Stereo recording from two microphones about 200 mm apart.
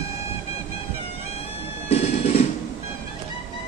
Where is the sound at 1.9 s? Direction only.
30° left (ahead or behind).